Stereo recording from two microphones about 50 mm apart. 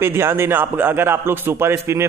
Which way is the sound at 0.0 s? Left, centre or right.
Right.